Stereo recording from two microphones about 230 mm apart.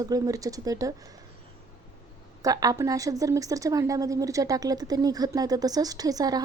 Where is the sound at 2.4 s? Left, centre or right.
Centre.